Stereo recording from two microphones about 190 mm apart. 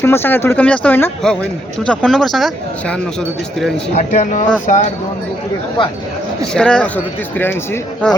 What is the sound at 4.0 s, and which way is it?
Speech, 40° left (ahead or behind).